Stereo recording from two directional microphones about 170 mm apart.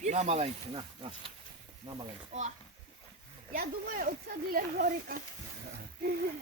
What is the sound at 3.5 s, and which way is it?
Speech, 55° right (ahead or behind).